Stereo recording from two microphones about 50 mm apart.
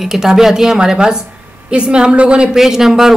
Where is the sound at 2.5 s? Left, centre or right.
Centre.